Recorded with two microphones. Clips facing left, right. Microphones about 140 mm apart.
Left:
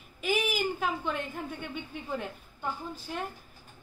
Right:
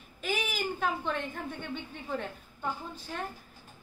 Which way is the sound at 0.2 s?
5° left (ahead or behind).